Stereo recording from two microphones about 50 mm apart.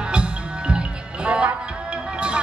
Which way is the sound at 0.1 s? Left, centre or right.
Centre.